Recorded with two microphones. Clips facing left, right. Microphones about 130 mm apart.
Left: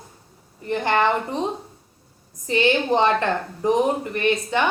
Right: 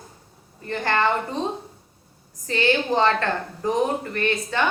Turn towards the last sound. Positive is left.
turn(degrees=15)  # may be behind; listen again after turning